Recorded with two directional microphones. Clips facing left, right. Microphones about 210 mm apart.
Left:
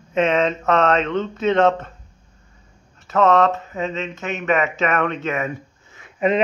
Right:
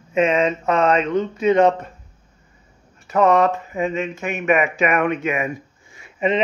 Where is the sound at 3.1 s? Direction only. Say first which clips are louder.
Even; 15° right (ahead or behind).